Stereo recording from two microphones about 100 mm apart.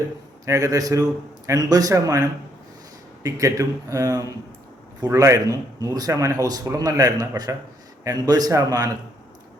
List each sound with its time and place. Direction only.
0.4 s a man's voice: 30° right (ahead or behind)
3.2 s a man's voice: 35° right (ahead or behind)